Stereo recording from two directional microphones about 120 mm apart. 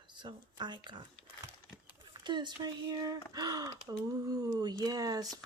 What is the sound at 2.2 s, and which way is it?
Speech, 40° right (ahead or behind).